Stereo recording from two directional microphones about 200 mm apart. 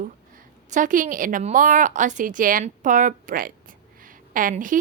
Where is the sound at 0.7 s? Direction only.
40° right (ahead or behind).